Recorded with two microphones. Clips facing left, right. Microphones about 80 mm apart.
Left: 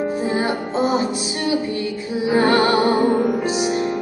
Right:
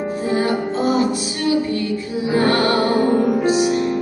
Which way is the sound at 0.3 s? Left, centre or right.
Left.